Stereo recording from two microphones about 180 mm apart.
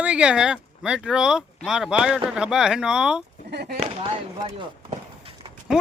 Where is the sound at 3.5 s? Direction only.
65° right (ahead or behind).